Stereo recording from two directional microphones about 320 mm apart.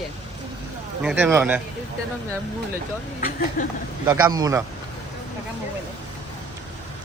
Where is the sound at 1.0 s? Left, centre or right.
Centre.